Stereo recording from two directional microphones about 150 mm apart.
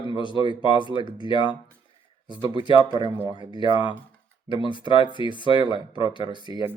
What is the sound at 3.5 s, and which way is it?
Speech, 35° left (ahead or behind).